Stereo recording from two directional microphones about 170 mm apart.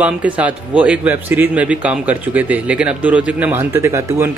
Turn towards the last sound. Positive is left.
turn(degrees=-15)  # may be behind; listen again after turning